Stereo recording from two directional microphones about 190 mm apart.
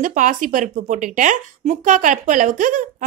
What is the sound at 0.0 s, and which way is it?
A woman's voice, 40° right (ahead or behind).